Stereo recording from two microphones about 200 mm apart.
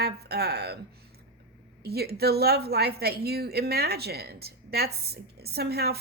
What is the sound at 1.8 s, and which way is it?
Speech, 50° right (ahead or behind).